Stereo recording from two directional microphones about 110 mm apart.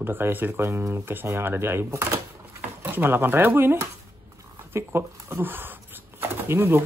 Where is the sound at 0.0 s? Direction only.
20° right (ahead or behind).